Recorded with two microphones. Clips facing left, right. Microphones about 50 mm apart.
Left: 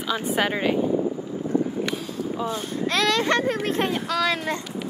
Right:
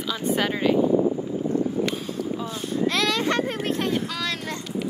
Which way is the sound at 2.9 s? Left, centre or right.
Left.